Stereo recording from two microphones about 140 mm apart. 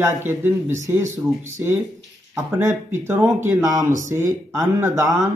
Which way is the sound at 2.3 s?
20° right (ahead or behind).